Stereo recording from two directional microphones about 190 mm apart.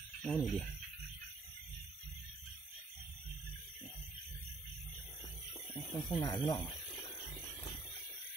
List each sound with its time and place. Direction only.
0.2 s speech: centre (ahead or behind)
5.7 s speech: 10° left (ahead or behind)